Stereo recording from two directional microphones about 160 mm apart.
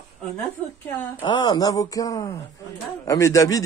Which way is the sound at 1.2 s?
25° left (ahead or behind).